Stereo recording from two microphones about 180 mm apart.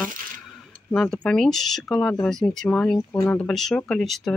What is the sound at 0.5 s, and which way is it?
Speech, 5° left (ahead or behind).